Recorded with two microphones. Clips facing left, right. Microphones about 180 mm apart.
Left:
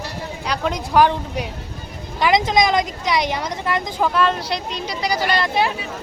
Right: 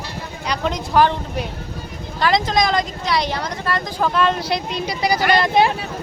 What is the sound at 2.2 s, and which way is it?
Speech, 15° left (ahead or behind).